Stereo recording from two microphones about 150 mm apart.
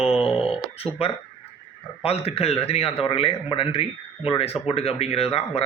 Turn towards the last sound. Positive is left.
turn(degrees=40)  # may be behind; listen again after turning